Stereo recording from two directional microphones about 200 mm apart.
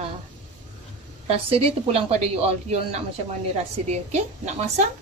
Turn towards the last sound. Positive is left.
turn(degrees=-35)  # may be behind; listen again after turning